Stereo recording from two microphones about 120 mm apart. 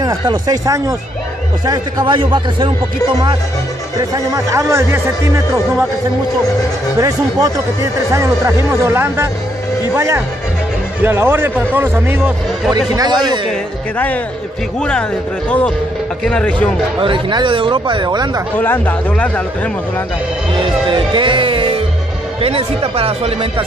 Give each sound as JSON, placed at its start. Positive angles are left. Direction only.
{"t": 0.0, "sound": "speech", "side_deg": -35}
{"t": 4.1, "sound": "speech", "side_deg": -25}
{"t": 7.0, "sound": "speech", "side_deg": -25}
{"t": 12.7, "sound": "speech", "side_deg": -35}
{"t": 13.5, "sound": "speech", "side_deg": 10}
{"t": 16.3, "sound": "speech", "side_deg": 10}
{"t": 17.0, "sound": "speech", "side_deg": -40}
{"t": 18.6, "sound": "speech", "side_deg": 15}
{"t": 20.5, "sound": "speech", "side_deg": -45}